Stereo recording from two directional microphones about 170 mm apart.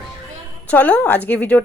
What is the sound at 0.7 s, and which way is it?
Speech, 10° left (ahead or behind).